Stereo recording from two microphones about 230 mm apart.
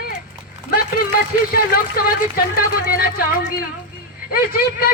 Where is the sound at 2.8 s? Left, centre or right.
Left.